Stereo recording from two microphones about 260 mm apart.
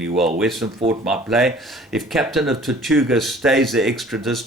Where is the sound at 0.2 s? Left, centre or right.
Centre.